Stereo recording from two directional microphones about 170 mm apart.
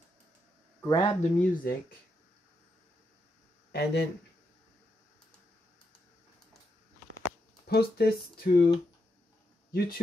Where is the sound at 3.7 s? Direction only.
75° left (ahead or behind).